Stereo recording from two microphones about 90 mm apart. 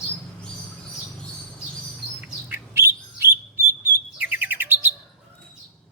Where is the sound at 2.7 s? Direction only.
30° right (ahead or behind).